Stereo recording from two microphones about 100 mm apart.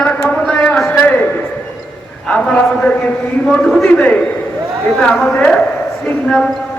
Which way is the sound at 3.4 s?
5° left (ahead or behind).